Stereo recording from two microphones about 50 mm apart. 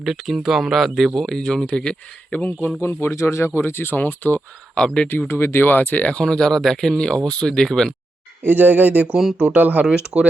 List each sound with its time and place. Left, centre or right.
0.0 s speech: centre
2.4 s speech: left
2.8 s speech: left
4.4 s speech: centre
5.3 s speech: left
6.1 s speech: centre
8.4 s speech: right
10.1 s speech: right